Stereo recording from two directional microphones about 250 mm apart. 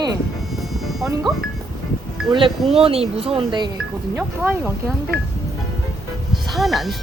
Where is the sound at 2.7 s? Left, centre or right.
Right.